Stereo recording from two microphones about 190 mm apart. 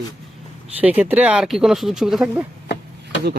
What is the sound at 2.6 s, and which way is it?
Chop, 60° left (ahead or behind).